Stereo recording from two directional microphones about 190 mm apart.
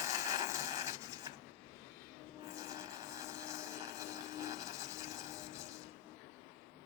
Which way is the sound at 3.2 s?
15° right (ahead or behind).